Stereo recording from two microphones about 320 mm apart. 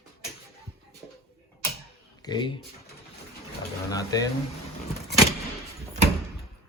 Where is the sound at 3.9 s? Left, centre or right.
Centre.